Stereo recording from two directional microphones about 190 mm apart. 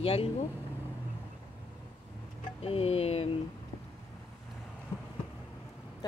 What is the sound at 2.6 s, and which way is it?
Speech, 30° left (ahead or behind).